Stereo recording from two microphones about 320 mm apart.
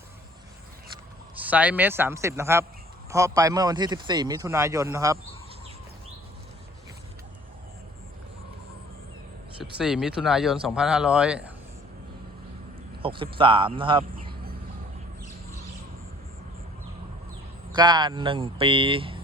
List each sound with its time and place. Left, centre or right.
1.4 s speech: centre
9.7 s speech: centre
13.0 s speech: centre
17.7 s speech: centre